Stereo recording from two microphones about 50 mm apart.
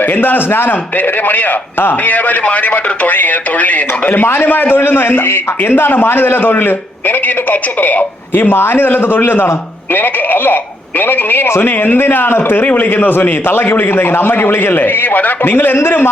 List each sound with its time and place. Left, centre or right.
0.0 s a man's voice: left
4.8 s a man's voice: left